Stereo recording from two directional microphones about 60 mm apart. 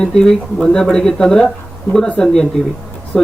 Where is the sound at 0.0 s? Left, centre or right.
Centre.